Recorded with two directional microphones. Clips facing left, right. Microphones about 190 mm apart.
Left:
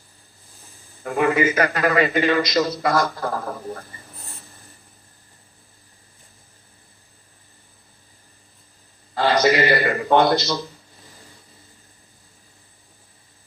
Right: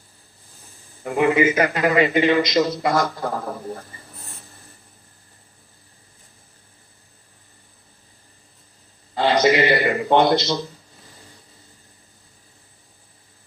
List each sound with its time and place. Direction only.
1.0 s a man's voice: 15° right (ahead or behind)
4.2 s a sound: centre (ahead or behind)
9.1 s a man's voice: 20° right (ahead or behind)